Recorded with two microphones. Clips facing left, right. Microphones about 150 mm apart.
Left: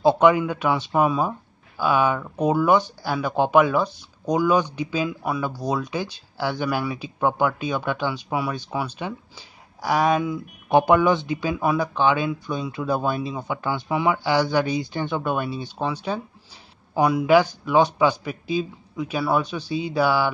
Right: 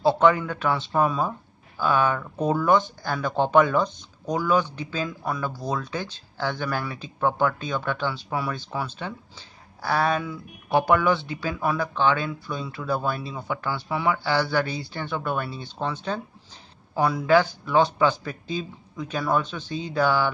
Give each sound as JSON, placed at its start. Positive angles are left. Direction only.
{"t": 0.0, "sound": "speech", "side_deg": 15}